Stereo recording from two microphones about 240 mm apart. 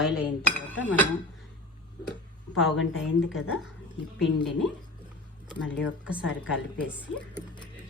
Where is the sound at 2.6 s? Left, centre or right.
Centre.